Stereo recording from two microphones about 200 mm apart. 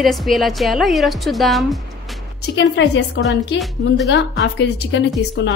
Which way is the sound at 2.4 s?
60° left (ahead or behind).